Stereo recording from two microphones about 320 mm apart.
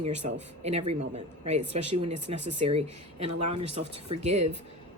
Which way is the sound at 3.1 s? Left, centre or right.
Right.